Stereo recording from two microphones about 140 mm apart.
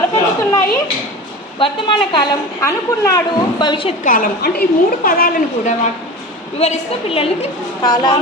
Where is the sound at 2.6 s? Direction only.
20° left (ahead or behind).